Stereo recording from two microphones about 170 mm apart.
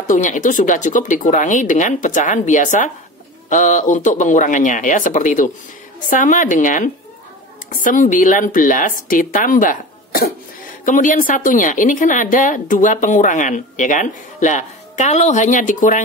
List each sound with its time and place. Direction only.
0.0 s speech: 50° left (ahead or behind)